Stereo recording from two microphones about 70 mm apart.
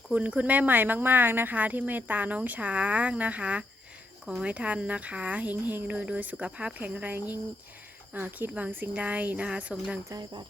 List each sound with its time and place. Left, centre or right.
0.1 s speech: right